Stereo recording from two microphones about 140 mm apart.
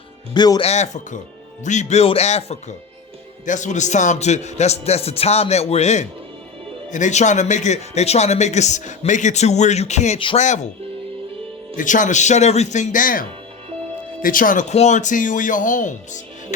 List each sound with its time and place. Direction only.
0.3 s speech: 30° left (ahead or behind)
0.6 s a man's voice: 55° left (ahead or behind)
11.8 s speech: 65° left (ahead or behind)